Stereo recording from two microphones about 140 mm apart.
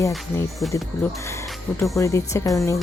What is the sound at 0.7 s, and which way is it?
Speech, 20° left (ahead or behind).